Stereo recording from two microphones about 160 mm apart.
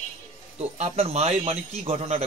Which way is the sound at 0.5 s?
40° right (ahead or behind).